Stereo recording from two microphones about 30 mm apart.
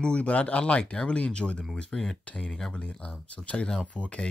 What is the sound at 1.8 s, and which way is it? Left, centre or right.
Speech, centre.